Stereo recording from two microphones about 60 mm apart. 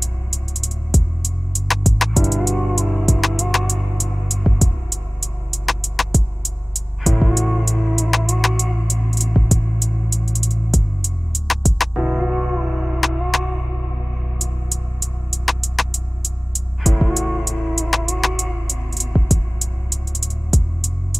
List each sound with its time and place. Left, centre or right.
0.0 s music: centre
12.0 s music: centre